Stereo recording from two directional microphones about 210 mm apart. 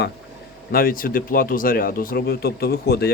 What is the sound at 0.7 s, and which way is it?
Speech, 45° left (ahead or behind).